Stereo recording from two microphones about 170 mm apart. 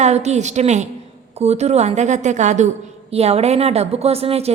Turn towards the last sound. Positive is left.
turn(degrees=-35)  # may be behind; listen again after turning